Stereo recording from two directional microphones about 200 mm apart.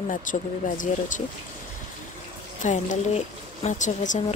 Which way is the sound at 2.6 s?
40° left (ahead or behind).